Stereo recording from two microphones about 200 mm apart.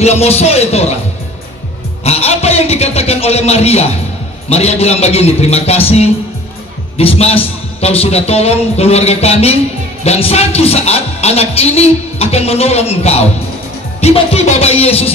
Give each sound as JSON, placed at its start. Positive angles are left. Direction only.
{"t": 0.0, "sound": "a woman's voice", "side_deg": 30}
{"t": 2.0, "sound": "a woman's voice", "side_deg": 30}